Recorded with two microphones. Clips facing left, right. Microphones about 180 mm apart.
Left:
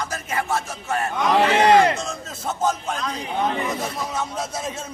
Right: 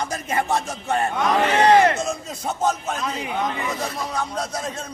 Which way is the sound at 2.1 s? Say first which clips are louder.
Right 2 dB; centre (ahead or behind).